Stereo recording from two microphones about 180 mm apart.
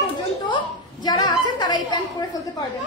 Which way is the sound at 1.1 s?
25° left (ahead or behind).